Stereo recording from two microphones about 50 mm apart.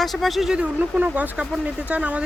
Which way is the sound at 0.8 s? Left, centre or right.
Right.